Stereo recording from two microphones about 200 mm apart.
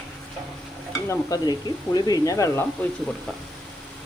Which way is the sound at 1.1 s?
15° left (ahead or behind).